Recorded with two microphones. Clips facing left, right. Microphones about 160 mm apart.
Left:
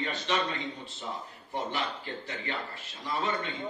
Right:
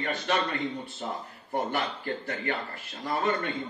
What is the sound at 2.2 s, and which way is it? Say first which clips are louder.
A man's voice: right 4 dB; 50° right (ahead or behind).